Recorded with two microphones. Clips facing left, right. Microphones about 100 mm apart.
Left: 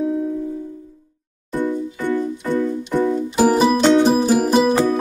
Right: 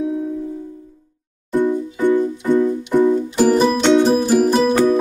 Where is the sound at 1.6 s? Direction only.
15° right (ahead or behind).